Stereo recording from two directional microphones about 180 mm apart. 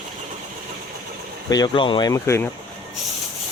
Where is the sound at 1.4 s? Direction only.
20° left (ahead or behind).